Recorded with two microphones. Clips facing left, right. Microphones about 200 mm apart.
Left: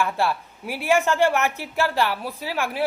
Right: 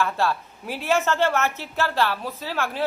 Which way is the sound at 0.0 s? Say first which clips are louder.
Even; 15° left (ahead or behind).